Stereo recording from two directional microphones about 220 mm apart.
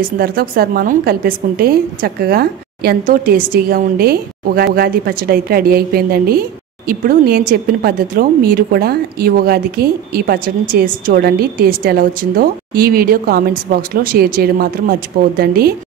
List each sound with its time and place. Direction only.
0.2 s a woman's voice: 45° right (ahead or behind)